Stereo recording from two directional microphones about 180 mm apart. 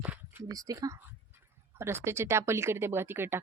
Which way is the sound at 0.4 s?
20° right (ahead or behind).